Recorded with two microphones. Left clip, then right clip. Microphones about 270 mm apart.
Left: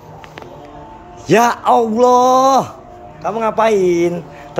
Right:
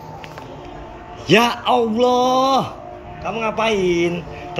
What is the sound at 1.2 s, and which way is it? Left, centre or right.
A man's voice, centre.